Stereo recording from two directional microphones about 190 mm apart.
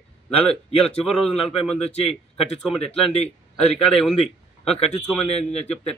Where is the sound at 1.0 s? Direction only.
5° right (ahead or behind).